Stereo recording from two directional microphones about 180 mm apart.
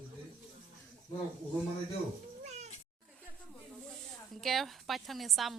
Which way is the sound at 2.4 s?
40° right (ahead or behind).